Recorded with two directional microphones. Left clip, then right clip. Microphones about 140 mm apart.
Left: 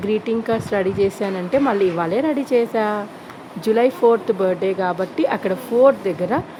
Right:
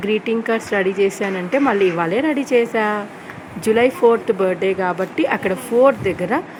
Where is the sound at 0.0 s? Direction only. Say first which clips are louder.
Right 1 dB; centre (ahead or behind).